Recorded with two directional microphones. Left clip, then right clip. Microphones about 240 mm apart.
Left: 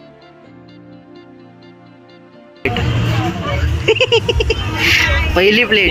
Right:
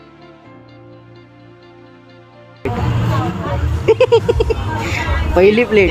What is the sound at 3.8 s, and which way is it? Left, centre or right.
Speech, centre.